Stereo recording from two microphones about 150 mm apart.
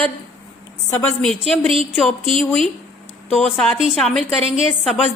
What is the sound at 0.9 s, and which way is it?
Speech, 15° left (ahead or behind).